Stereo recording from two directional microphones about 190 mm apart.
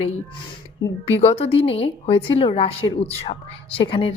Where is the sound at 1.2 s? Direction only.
35° left (ahead or behind).